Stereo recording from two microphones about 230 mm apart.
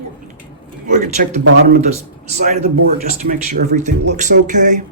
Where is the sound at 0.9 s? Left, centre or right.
Right.